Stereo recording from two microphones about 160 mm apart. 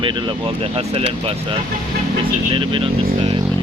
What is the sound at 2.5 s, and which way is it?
Speech, 30° right (ahead or behind).